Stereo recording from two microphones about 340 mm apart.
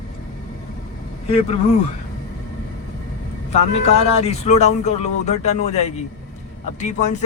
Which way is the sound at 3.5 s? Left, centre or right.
Centre.